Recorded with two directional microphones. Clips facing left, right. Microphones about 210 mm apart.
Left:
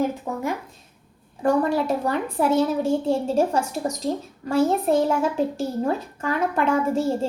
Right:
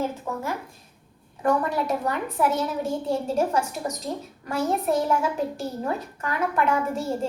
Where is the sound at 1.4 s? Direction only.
30° left (ahead or behind).